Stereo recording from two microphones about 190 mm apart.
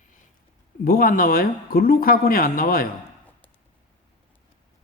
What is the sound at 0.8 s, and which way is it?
Speech, 50° left (ahead or behind).